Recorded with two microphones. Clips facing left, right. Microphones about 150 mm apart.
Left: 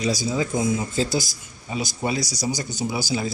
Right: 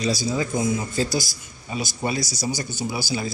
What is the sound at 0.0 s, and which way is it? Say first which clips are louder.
Speech: even; 15° left (ahead or behind).